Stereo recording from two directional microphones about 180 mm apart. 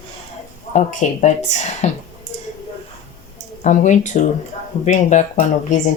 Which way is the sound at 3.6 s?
40° left (ahead or behind).